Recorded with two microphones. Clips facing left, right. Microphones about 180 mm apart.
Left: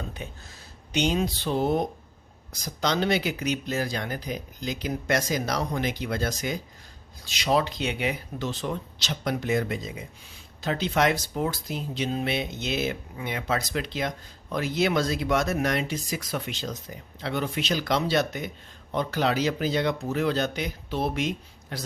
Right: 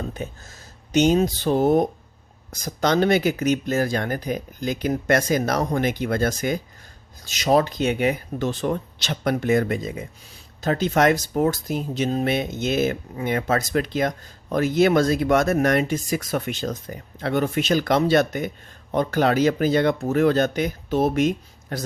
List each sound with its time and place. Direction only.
0.1 s speech: 45° right (ahead or behind)